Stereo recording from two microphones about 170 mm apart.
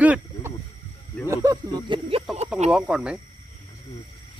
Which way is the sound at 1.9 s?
35° right (ahead or behind).